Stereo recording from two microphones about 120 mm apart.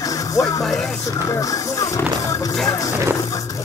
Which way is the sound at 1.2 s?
30° left (ahead or behind).